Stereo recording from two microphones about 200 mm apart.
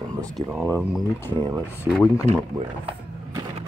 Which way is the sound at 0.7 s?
10° left (ahead or behind).